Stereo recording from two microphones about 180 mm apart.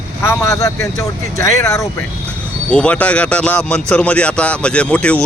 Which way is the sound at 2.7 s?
5° left (ahead or behind).